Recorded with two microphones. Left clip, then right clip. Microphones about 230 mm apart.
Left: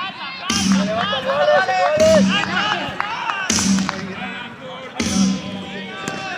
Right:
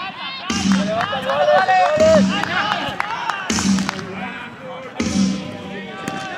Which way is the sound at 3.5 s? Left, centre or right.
Left.